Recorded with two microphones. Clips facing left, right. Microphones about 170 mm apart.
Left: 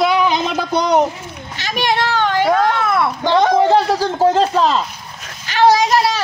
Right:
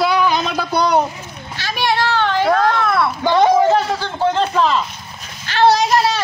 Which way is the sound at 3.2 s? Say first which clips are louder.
Right 1 dB; 10° right (ahead or behind).